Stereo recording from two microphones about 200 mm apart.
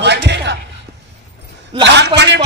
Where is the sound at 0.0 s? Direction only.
60° right (ahead or behind).